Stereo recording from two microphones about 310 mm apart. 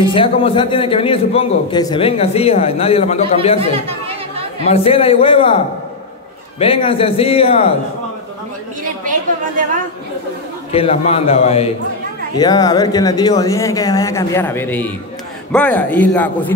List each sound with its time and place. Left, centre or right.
0.0 s a man's voice: centre
4.6 s a man's voice: centre
6.6 s a man's voice: centre
10.7 s a man's voice: centre